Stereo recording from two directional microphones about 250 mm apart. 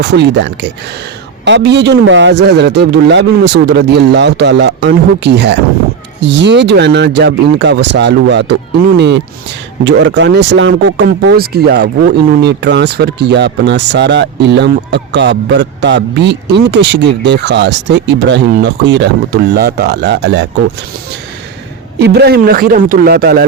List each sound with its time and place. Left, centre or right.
0.0 s speech: right
21.9 s a man's voice: right